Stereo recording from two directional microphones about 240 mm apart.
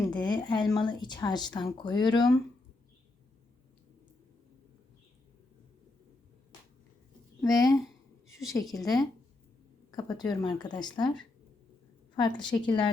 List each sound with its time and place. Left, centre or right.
0.1 s speech: centre
7.4 s a woman's voice: centre